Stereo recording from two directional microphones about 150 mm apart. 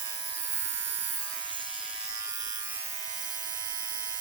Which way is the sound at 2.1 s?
25° right (ahead or behind).